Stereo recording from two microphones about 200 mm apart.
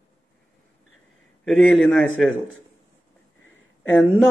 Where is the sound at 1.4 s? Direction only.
5° left (ahead or behind).